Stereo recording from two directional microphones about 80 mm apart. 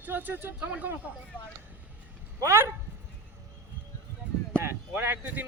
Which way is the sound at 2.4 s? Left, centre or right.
Right.